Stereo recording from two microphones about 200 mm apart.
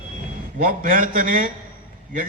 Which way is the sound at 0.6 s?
45° right (ahead or behind).